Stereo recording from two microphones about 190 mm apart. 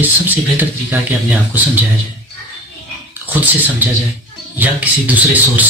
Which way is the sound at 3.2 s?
10° right (ahead or behind).